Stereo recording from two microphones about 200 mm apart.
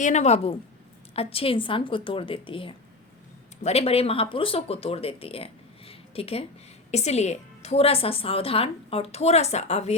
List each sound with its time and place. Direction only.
0.0 s a woman's voice: 35° left (ahead or behind)